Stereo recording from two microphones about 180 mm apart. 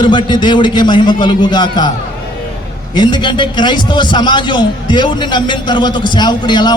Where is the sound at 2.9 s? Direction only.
25° left (ahead or behind).